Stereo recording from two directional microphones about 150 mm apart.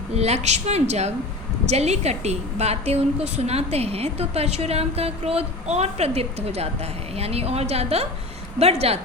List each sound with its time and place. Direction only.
0.1 s a woman's voice: 45° right (ahead or behind)